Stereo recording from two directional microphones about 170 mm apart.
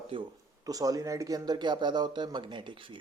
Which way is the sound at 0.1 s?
30° right (ahead or behind).